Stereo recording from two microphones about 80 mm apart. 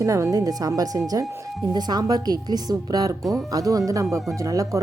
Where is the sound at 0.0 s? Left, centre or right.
Right.